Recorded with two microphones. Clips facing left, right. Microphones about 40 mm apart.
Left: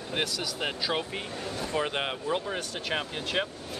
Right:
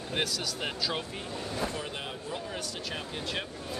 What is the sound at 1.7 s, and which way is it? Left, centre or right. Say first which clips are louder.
Speech: left 7 dB; left.